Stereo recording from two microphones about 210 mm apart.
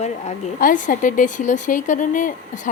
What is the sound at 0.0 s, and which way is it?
A woman's voice, 35° left (ahead or behind).